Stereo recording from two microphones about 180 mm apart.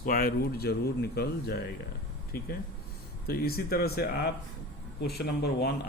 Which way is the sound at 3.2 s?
55° left (ahead or behind).